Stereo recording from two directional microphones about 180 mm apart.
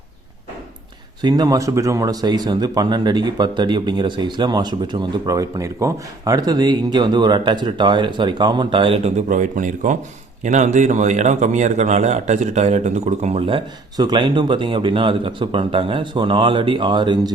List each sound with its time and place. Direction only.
1.2 s a man's voice: 20° right (ahead or behind)